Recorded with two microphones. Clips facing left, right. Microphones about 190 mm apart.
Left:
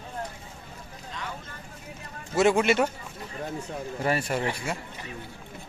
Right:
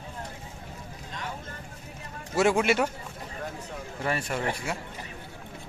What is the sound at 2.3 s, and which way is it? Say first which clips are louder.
Speech: left 2 dB; 5° right (ahead or behind).